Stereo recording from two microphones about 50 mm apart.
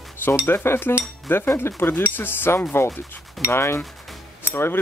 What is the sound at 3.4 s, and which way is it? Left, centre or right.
Speech, left.